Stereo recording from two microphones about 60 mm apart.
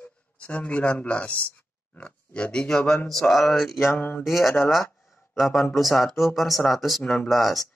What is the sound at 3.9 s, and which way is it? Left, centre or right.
Speech, left.